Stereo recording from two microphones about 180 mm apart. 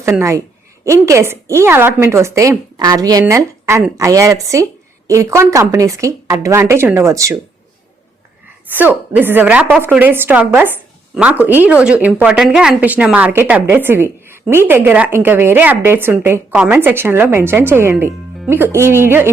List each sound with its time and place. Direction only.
0.0 s a woman's voice: 15° right (ahead or behind)
8.7 s a woman's voice: 10° right (ahead or behind)